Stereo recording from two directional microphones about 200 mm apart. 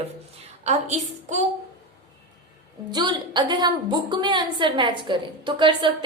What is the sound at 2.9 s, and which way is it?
A woman's voice, 20° right (ahead or behind).